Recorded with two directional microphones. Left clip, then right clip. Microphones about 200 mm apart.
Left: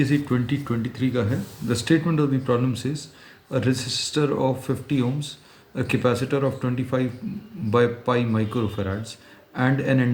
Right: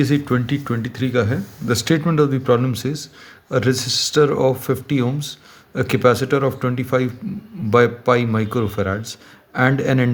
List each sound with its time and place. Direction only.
0.0 s speech: 50° right (ahead or behind)